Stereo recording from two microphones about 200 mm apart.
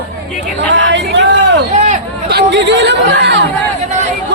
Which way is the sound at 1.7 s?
35° right (ahead or behind).